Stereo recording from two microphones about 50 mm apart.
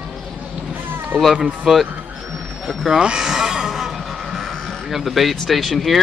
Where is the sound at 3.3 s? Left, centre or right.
Centre.